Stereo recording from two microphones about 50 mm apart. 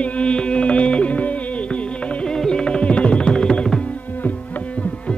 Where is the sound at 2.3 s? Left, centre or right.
Centre.